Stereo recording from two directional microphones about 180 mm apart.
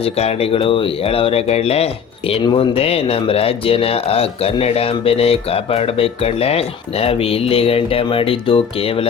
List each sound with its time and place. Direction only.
0.0 s speech: 35° left (ahead or behind)